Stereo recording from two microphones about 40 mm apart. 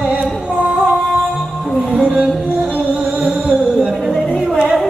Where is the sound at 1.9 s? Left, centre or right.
Centre.